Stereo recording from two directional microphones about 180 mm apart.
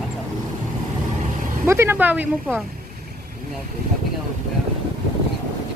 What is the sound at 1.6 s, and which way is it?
Speech, 15° right (ahead or behind).